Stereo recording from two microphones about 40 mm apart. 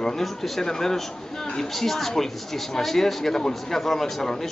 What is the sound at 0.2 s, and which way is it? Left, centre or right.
Speech, centre.